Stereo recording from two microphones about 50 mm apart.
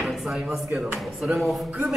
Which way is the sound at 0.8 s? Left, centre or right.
Right.